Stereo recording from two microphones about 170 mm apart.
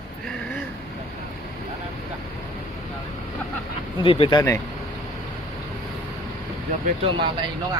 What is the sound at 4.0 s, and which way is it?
Speech, 30° left (ahead or behind).